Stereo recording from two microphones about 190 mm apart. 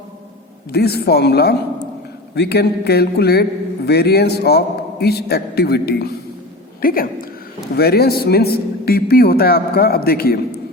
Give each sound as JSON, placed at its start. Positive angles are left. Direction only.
{"t": 0.7, "sound": "a man's voice", "side_deg": 55}